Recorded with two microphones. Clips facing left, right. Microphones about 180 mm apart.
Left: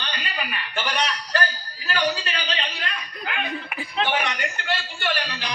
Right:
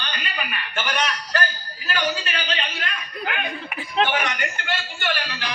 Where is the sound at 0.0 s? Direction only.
30° left (ahead or behind).